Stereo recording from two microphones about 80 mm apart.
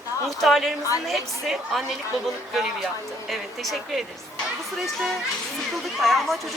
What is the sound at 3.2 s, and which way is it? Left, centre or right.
Speech, centre.